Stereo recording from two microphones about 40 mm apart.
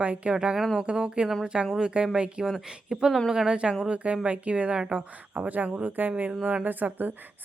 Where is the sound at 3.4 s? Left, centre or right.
Right.